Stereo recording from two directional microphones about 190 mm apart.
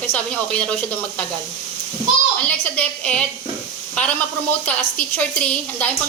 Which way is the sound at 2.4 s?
5° left (ahead or behind).